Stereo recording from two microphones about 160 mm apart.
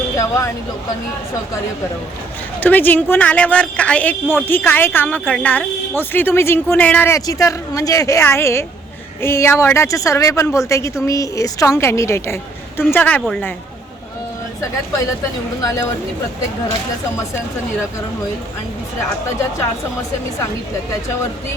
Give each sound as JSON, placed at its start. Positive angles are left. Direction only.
{"t": 0.2, "sound": "speech", "side_deg": 20}
{"t": 2.6, "sound": "a woman's voice", "side_deg": 10}